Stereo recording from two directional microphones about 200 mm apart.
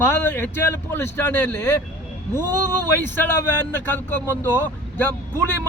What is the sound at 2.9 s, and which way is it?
Speech, 10° left (ahead or behind).